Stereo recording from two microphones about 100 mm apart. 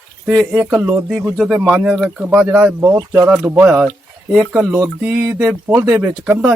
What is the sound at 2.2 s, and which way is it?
Speech, 15° right (ahead or behind).